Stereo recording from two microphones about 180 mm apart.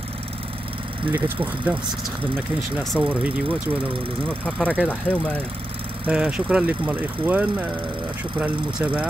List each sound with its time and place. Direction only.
1.1 s speech: 10° right (ahead or behind)
2.8 s speech: centre (ahead or behind)
4.3 s speech: 5° left (ahead or behind)
6.0 s speech: 5° right (ahead or behind)